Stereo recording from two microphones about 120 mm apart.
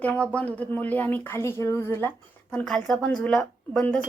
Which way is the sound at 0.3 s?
10° left (ahead or behind).